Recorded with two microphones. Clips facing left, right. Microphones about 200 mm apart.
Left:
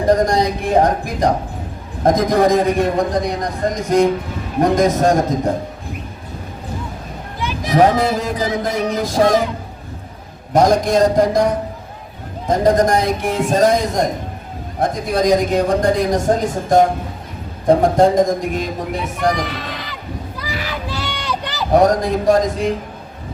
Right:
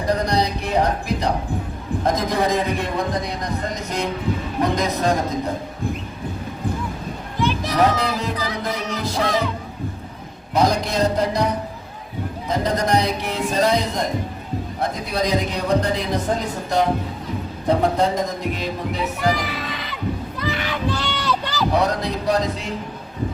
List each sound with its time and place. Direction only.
0.1 s a man's voice: 50° left (ahead or behind)
7.7 s a man's voice: 50° left (ahead or behind)
10.5 s a man's voice: 45° left (ahead or behind)
12.5 s a man's voice: 50° left (ahead or behind)
19.4 s a sound: centre (ahead or behind)
21.7 s a man's voice: 50° left (ahead or behind)